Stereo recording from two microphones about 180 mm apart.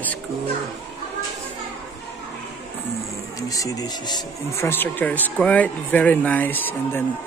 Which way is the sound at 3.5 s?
20° left (ahead or behind).